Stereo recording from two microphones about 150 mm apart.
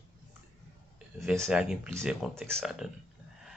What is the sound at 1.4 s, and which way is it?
Speech, 5° right (ahead or behind).